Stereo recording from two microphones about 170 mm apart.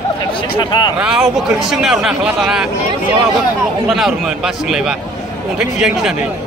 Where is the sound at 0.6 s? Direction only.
25° left (ahead or behind).